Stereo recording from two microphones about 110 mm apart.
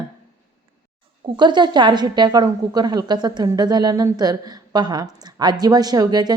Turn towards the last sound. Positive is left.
turn(degrees=-40)  # may be behind; listen again after turning